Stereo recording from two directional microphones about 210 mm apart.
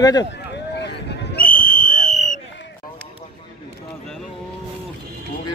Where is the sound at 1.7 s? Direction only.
40° left (ahead or behind).